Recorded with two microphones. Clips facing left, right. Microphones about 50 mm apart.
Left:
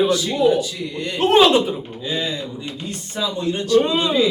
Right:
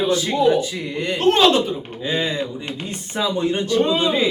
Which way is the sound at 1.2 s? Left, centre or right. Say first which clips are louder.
Left 2 dB; centre.